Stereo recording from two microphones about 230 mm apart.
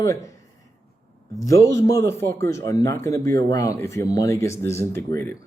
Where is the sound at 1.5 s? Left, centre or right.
Centre.